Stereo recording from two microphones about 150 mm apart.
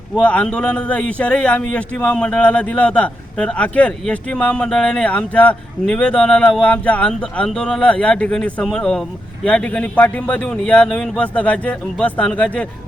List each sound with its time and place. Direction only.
0.2 s a man's voice: 10° left (ahead or behind)